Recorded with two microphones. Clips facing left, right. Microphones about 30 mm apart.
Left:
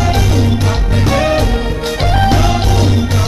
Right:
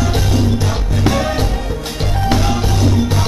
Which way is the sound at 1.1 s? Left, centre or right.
Left.